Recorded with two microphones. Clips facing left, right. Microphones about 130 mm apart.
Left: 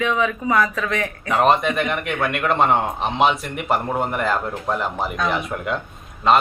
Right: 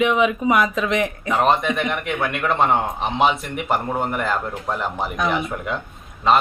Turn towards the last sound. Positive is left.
turn(degrees=0)  # may be behind; listen again after turning